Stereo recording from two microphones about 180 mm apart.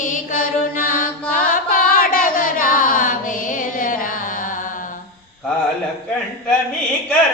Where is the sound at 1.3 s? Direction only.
50° left (ahead or behind).